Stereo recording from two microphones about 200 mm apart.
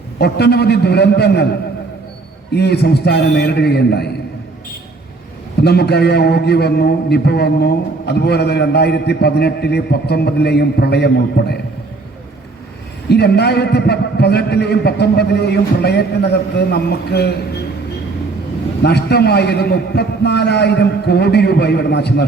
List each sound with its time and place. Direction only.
0.2 s a man's voice: 55° left (ahead or behind)
2.5 s a man's voice: 55° left (ahead or behind)
5.6 s a man's voice: 55° left (ahead or behind)
13.1 s a man's voice: 55° left (ahead or behind)
18.8 s a man's voice: 55° left (ahead or behind)